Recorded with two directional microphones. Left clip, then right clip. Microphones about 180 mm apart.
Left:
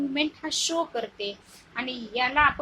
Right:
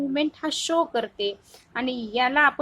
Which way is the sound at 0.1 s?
35° right (ahead or behind).